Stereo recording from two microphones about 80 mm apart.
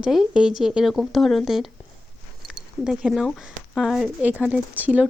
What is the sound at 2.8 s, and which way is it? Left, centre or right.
Speech, centre.